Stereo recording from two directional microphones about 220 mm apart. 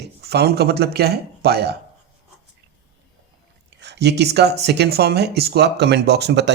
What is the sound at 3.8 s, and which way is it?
Speech, 50° right (ahead or behind).